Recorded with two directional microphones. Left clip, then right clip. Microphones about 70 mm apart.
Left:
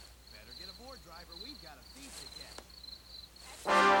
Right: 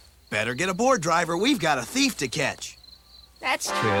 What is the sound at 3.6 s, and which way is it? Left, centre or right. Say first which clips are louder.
Speech: left 4 dB; left.